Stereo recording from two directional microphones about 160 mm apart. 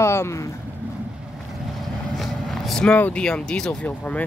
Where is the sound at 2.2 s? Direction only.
Centre (ahead or behind).